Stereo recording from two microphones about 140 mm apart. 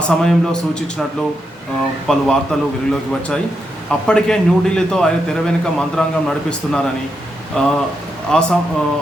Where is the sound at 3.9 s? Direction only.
5° left (ahead or behind).